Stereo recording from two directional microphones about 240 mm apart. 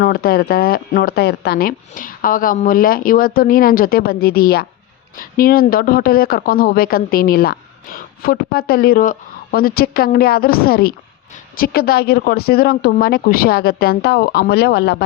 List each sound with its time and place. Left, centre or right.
0.0 s speech: left